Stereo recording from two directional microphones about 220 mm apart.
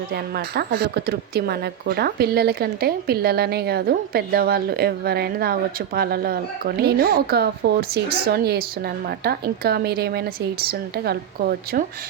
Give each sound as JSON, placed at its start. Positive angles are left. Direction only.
{"t": 0.1, "sound": "speech", "side_deg": -45}